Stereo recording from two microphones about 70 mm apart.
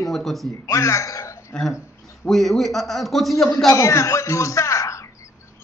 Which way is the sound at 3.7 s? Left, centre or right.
Left.